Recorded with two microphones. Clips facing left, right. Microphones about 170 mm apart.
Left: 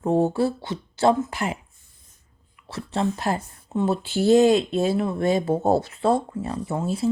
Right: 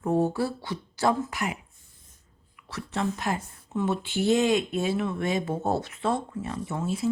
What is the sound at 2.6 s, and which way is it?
Speech, 30° left (ahead or behind).